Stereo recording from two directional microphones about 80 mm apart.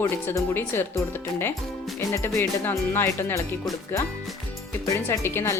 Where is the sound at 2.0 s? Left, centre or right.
Left.